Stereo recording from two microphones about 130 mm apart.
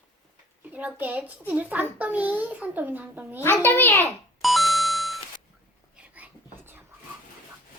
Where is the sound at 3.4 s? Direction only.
15° left (ahead or behind).